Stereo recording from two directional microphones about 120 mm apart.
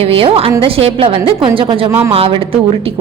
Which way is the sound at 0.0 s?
50° right (ahead or behind).